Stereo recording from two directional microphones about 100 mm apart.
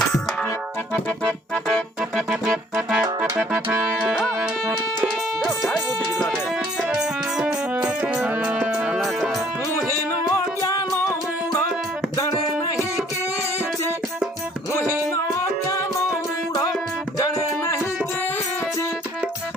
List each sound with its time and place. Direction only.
1.5 s keyboard: 10° left (ahead or behind)
2.0 s music: 5° right (ahead or behind)
3.3 s music: 15° right (ahead or behind)
10.2 s music: 30° left (ahead or behind)
15.1 s music: 30° left (ahead or behind)
17.2 s music: 35° left (ahead or behind)